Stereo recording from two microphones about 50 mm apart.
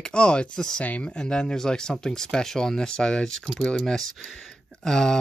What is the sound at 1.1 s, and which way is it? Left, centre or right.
Speech, centre.